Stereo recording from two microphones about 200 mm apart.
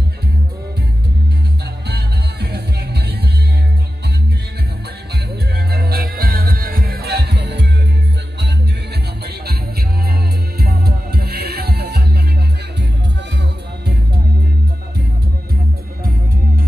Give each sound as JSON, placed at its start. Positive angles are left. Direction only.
{"t": 1.9, "sound": "music", "side_deg": -55}
{"t": 5.7, "sound": "music", "side_deg": -50}
{"t": 9.2, "sound": "music", "side_deg": -50}